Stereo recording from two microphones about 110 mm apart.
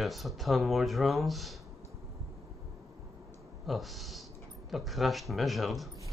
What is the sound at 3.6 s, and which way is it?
Speech, centre (ahead or behind).